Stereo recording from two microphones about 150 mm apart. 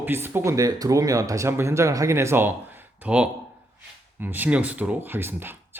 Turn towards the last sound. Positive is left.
turn(degrees=-15)  # may be behind; listen again after turning